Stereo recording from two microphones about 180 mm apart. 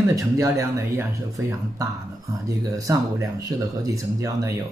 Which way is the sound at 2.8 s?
15° right (ahead or behind).